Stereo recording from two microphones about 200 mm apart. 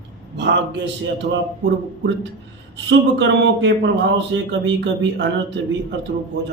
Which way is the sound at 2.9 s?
65° right (ahead or behind).